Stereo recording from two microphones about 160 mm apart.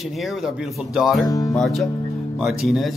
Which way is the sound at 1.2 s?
20° left (ahead or behind).